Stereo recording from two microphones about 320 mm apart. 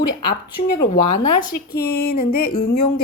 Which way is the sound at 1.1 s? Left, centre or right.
Left.